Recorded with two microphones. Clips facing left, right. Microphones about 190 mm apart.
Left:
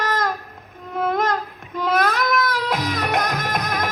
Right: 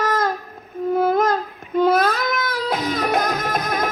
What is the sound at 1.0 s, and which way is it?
Music, 30° right (ahead or behind).